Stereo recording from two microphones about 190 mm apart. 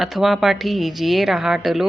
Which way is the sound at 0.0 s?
Centre (ahead or behind).